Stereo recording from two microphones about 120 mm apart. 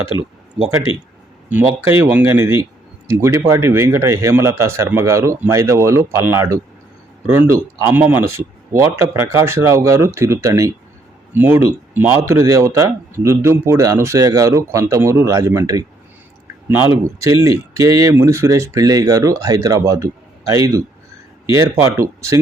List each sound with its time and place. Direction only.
1.5 s speech: 15° right (ahead or behind)